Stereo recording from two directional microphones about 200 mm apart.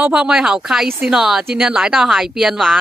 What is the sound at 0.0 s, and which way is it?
Speech, 5° right (ahead or behind).